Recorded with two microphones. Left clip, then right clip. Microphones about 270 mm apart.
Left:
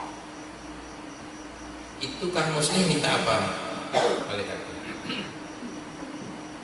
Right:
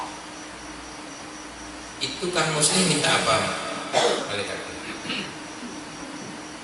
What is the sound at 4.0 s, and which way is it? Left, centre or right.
Cough, centre.